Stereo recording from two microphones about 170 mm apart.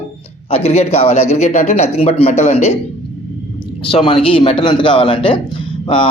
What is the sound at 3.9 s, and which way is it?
A man's voice, 35° left (ahead or behind).